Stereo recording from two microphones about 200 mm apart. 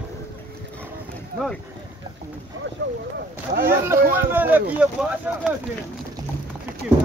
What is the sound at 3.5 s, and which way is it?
Speech, 35° right (ahead or behind).